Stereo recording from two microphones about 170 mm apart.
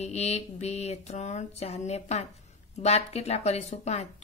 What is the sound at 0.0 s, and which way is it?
A woman's voice, 40° left (ahead or behind).